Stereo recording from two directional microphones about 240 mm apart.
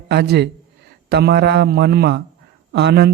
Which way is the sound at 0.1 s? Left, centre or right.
Right.